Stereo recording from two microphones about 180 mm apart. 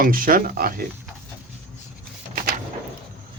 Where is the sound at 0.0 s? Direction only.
50° right (ahead or behind).